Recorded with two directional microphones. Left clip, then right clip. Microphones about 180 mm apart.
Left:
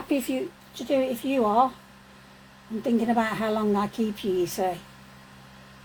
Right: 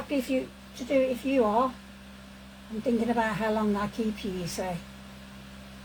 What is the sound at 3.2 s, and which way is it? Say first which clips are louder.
Speech: left 2 dB; 90° left.